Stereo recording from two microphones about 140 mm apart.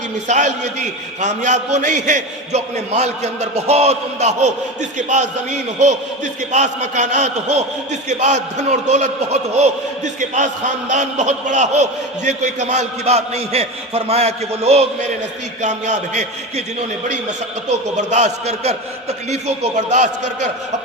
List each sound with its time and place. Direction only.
0.3 s a man's voice: 60° right (ahead or behind)
17.7 s a man's voice: 55° right (ahead or behind)